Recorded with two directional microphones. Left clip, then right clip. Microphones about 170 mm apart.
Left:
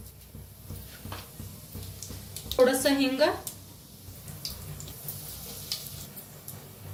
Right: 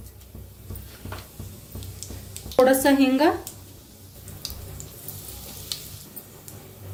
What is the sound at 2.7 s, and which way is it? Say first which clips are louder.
Speech: right 7 dB; 55° right (ahead or behind).